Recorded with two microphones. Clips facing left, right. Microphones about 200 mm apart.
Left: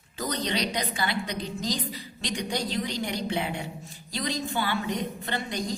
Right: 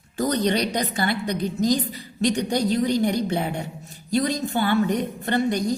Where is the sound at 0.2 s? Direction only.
50° right (ahead or behind).